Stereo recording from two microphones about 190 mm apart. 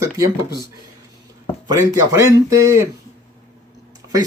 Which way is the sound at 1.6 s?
15° right (ahead or behind).